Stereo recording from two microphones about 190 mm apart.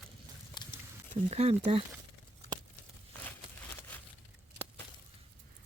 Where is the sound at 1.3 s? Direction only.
35° right (ahead or behind).